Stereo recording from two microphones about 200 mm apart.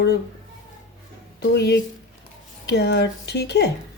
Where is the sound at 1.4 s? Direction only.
55° left (ahead or behind).